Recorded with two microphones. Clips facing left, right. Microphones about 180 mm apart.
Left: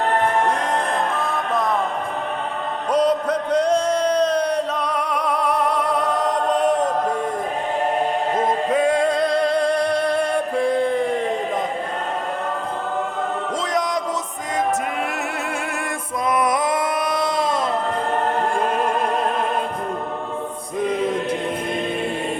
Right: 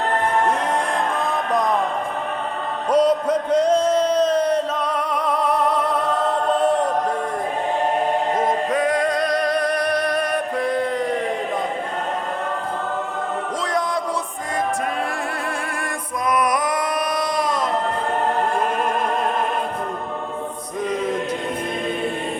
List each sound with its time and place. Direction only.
2.9 s music: 10° right (ahead or behind)
4.4 s music: 10° left (ahead or behind)
6.5 s chant: 20° left (ahead or behind)
8.4 s music: 25° left (ahead or behind)
10.6 s a sound: 25° left (ahead or behind)
15.1 s music: 25° left (ahead or behind)
16.3 s a sound: 25° left (ahead or behind)